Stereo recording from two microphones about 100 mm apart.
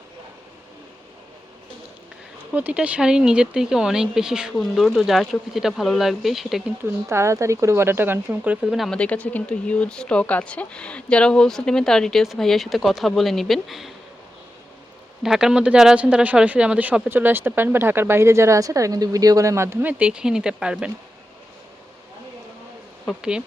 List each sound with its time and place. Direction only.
2.5 s speech: 15° right (ahead or behind)
6.8 s speech: 25° right (ahead or behind)
8.7 s speech: centre (ahead or behind)
9.0 s speech: 15° left (ahead or behind)
15.2 s speech: 5° right (ahead or behind)